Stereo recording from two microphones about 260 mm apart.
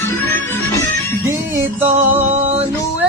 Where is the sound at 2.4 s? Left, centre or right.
Right.